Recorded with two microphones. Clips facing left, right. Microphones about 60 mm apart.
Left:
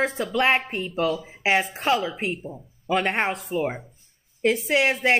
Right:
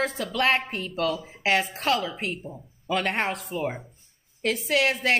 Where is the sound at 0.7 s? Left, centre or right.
Centre.